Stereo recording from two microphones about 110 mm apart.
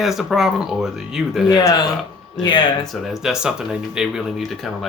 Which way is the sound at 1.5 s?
35° left (ahead or behind).